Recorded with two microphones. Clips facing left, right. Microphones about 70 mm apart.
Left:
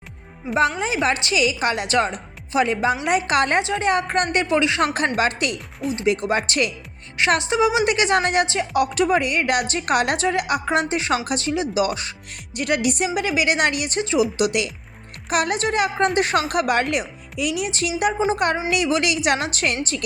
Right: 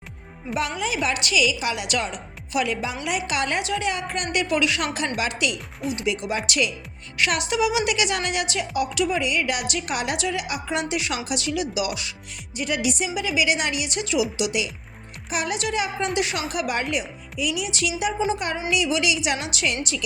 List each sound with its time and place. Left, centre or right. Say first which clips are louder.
0.8 s a woman's voice: left 3 dB; left
3.6 s a woman's voice: left 3 dB; left
3.8 s speech: left 7 dB; left
4.9 s a woman's voice: left 5 dB; left
7.2 s a woman's voice: left 4 dB; left
12.5 s a woman's voice: left 4 dB; left
14.0 s speech: left 4 dB; left
14.3 s a woman's voice: left 4 dB; left
15.5 s a woman's voice: left 5 dB; left